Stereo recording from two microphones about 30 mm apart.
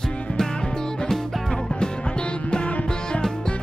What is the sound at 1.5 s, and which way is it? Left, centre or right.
Music, left.